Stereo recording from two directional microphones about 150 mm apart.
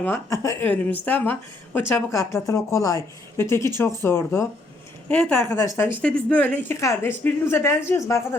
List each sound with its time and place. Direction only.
0.0 s speech: 15° left (ahead or behind)